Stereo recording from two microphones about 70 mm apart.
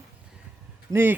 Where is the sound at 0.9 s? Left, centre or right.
Right.